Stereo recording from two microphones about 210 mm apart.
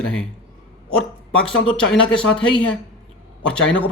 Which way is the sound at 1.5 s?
70° left (ahead or behind).